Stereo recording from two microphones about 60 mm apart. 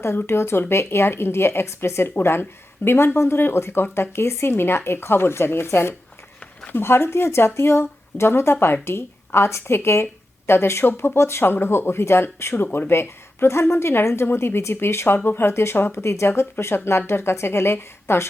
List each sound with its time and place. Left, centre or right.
0.0 s speech: left